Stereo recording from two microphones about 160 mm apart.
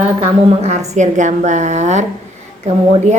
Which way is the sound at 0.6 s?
45° right (ahead or behind).